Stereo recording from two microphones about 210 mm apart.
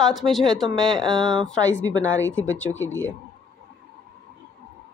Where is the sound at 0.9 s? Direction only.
Centre (ahead or behind).